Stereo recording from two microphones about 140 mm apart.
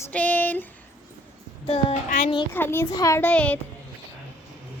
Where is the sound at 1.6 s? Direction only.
45° left (ahead or behind).